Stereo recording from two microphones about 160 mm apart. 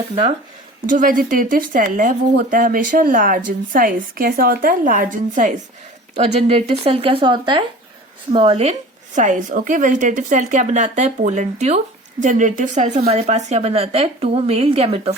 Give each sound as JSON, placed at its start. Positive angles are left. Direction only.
{"t": 0.9, "sound": "speech", "side_deg": -55}
{"t": 9.1, "sound": "a woman's voice", "side_deg": -50}